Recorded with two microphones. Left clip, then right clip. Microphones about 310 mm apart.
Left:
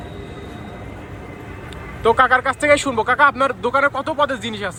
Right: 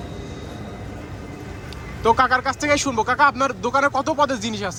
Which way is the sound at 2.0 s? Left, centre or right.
Centre.